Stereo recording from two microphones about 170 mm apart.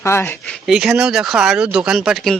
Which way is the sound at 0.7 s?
5° right (ahead or behind).